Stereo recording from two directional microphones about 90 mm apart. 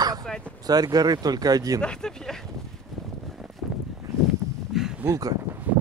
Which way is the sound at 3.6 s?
5° right (ahead or behind).